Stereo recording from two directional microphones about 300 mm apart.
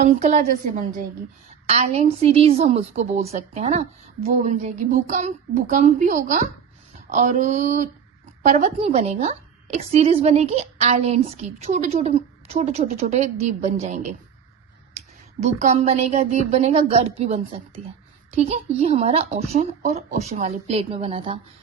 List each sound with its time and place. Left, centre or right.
0.0 s a woman's voice: right
15.4 s a woman's voice: right